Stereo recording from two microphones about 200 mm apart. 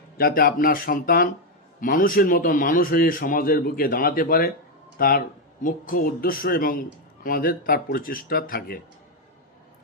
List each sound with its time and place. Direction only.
0.2 s a man's voice: 50° left (ahead or behind)